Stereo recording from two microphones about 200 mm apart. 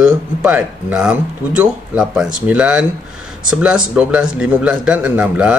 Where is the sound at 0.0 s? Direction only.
5° right (ahead or behind).